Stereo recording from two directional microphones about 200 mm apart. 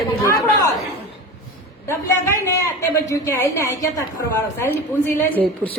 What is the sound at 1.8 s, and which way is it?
A woman's voice, 15° left (ahead or behind).